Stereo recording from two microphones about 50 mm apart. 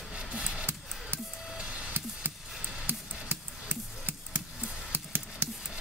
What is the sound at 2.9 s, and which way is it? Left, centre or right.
Music, right.